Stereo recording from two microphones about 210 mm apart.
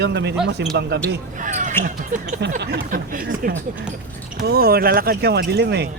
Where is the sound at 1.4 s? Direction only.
35° right (ahead or behind).